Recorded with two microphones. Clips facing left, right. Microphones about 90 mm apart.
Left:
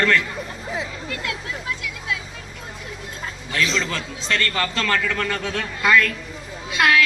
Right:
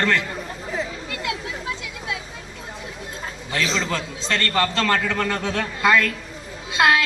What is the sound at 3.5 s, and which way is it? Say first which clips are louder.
Speech: left 1 dB; 30° right (ahead or behind).